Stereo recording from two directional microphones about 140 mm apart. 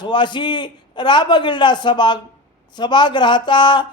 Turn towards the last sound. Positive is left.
turn(degrees=35)  # may be behind; listen again after turning